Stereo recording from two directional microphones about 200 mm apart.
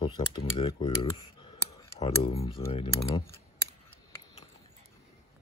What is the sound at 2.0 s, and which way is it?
Speech, 30° left (ahead or behind).